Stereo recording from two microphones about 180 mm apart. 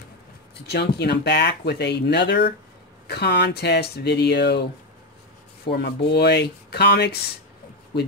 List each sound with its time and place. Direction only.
0.7 s speech: 65° left (ahead or behind)
5.7 s speech: 65° left (ahead or behind)